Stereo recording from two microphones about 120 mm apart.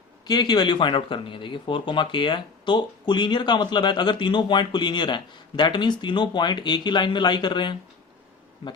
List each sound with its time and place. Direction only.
0.3 s speech: 35° left (ahead or behind)